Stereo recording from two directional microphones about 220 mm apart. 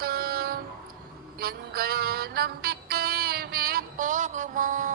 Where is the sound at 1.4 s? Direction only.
45° right (ahead or behind).